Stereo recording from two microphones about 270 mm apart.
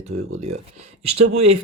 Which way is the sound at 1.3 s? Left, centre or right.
Right.